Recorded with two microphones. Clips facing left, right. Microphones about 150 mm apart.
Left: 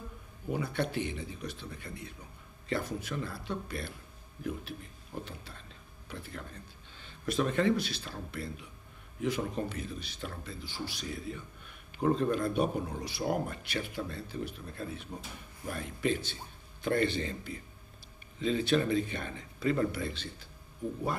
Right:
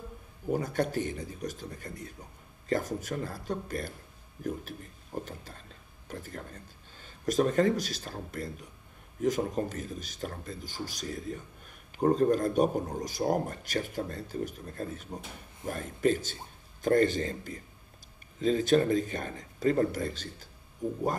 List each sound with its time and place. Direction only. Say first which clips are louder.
0.5 s speech: right 4 dB; 45° right (ahead or behind)